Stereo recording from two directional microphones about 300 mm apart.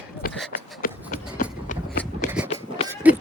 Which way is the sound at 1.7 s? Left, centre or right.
Left.